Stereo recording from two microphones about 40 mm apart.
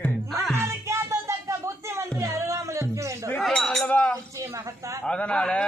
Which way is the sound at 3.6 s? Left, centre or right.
Centre.